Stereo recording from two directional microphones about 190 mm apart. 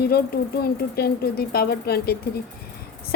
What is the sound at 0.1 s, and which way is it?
A woman's voice, 55° left (ahead or behind).